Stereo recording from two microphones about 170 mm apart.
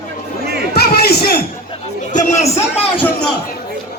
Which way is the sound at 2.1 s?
40° left (ahead or behind).